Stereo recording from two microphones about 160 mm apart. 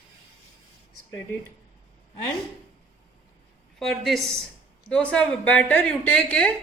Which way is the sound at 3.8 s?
Centre (ahead or behind).